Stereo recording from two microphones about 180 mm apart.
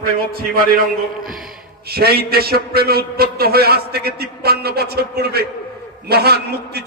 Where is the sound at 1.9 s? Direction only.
60° right (ahead or behind).